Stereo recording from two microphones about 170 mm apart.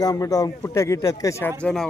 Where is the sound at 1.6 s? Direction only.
5° left (ahead or behind).